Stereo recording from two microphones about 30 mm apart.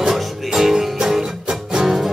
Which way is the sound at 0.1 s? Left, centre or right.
Centre.